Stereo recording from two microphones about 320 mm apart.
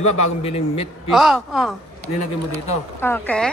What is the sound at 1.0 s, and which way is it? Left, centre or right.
Speech, centre.